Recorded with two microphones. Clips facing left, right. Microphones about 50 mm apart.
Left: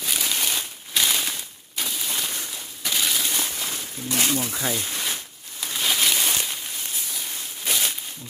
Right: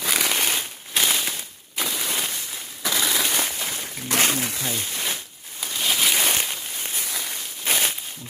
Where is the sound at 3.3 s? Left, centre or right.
Right.